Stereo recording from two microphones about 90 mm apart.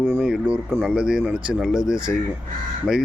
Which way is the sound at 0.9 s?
10° right (ahead or behind).